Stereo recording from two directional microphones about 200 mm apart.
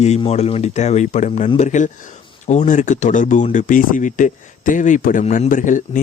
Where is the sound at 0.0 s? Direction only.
30° left (ahead or behind).